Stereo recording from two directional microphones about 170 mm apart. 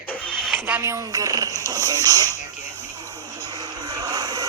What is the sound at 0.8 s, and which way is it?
Music, 15° right (ahead or behind).